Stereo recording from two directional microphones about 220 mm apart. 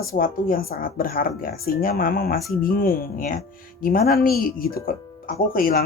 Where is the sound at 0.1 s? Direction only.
40° left (ahead or behind).